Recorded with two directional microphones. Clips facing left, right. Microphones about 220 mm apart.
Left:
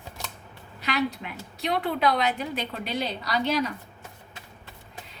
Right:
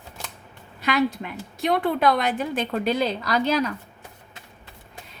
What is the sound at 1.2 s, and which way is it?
A woman's voice, 50° right (ahead or behind).